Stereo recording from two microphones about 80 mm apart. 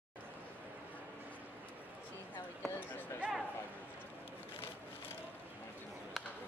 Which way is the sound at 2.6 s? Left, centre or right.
Left.